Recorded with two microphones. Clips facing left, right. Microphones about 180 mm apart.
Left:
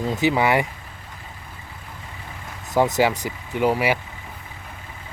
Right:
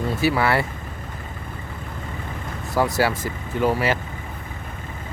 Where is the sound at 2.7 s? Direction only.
20° left (ahead or behind).